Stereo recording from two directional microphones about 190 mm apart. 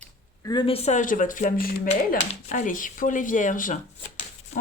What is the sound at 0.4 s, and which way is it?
Speech, 25° left (ahead or behind).